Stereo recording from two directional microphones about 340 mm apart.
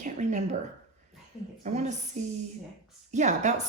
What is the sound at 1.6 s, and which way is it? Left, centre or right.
A woman's voice, centre.